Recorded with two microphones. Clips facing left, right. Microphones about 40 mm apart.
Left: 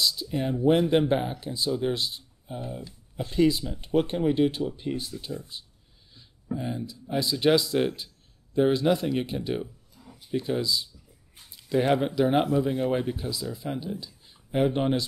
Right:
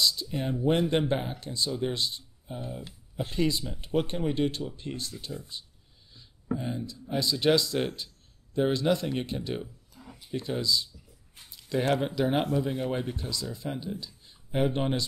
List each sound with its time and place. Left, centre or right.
0.0 s speech: centre
6.1 s speech: centre
10.0 s a sound: right
10.3 s speech: centre